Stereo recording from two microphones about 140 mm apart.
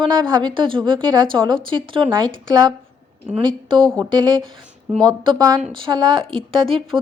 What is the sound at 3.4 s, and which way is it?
A woman's voice, 30° right (ahead or behind).